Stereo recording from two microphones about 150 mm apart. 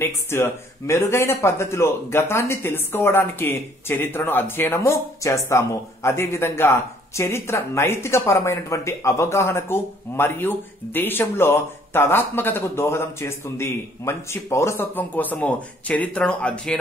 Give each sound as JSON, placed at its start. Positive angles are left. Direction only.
{"t": 0.0, "sound": "speech", "side_deg": 15}